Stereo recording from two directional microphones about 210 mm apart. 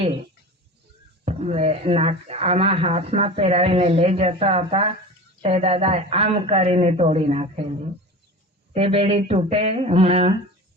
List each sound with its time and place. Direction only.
0.0 s speech: 25° right (ahead or behind)
8.7 s speech: 30° right (ahead or behind)